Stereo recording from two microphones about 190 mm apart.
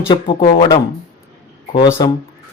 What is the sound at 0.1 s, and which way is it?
Speech, 25° left (ahead or behind).